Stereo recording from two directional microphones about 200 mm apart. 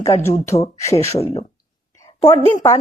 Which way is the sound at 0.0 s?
15° left (ahead or behind).